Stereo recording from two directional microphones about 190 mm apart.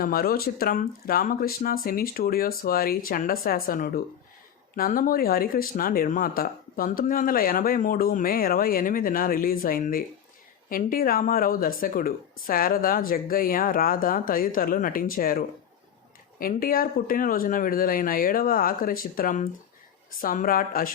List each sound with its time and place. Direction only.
0.0 s speech: 50° left (ahead or behind)